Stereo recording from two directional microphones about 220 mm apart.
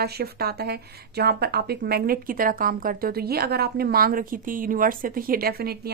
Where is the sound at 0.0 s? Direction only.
45° right (ahead or behind).